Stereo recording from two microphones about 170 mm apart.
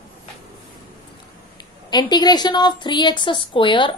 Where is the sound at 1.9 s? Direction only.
25° left (ahead or behind).